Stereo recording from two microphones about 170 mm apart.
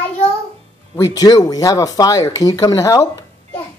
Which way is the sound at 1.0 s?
25° left (ahead or behind).